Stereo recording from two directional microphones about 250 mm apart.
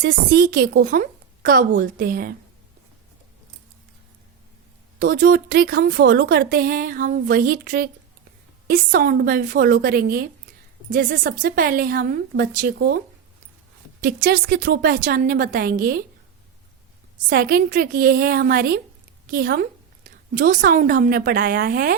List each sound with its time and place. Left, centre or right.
0.0 s speech: right
4.9 s speech: right
14.0 s speech: right
17.2 s speech: right